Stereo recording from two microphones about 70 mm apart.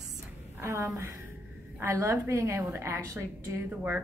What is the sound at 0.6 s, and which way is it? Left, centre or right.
A woman's voice, right.